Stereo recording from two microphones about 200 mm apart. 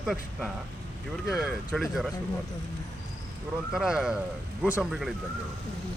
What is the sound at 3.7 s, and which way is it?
Speech, 5° right (ahead or behind).